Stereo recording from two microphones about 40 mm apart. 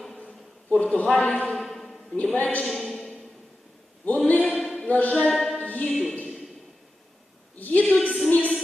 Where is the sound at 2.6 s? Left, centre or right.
Centre.